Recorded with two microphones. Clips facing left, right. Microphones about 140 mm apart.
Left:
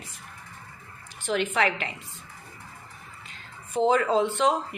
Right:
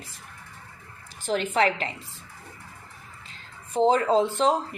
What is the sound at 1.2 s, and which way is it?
Speech, 35° right (ahead or behind).